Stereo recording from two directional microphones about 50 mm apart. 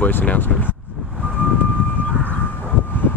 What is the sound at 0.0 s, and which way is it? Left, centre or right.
Speech, left.